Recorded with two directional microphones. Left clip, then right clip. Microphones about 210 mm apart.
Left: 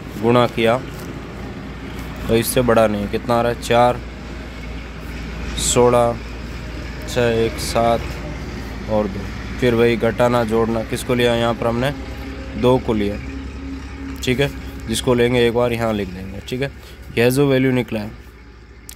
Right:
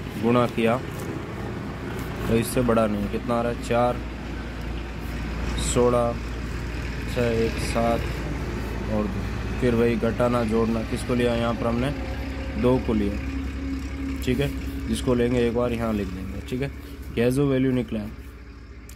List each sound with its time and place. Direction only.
0.3 s speech: 25° left (ahead or behind)
2.3 s speech: 25° left (ahead or behind)
5.8 s speech: 30° left (ahead or behind)
7.2 s speech: 30° left (ahead or behind)
9.6 s speech: 30° left (ahead or behind)
14.2 s speech: 35° left (ahead or behind)